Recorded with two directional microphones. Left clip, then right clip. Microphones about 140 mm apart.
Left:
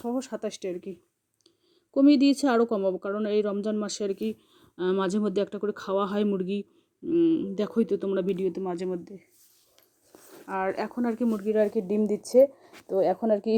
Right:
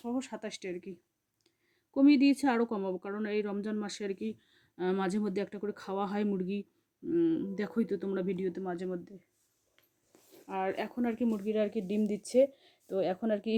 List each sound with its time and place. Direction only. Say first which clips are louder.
0.0 s speech: left 7 dB; 15° left (ahead or behind)
8.2 s speech: left 7 dB; 30° right (ahead or behind)
8.5 s speech: left 6 dB; 30° left (ahead or behind)
10.5 s speech: left 5 dB; 10° left (ahead or behind)